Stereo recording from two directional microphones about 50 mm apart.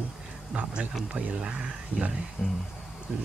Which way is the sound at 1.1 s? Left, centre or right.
Right.